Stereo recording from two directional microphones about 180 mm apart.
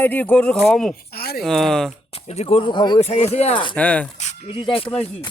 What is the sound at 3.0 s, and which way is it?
Speech, 35° left (ahead or behind).